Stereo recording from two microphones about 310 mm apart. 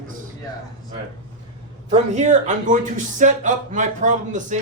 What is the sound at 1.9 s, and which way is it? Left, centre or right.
A man's voice, right.